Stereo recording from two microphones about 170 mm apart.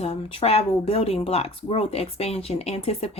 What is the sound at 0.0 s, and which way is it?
Speech, 35° left (ahead or behind).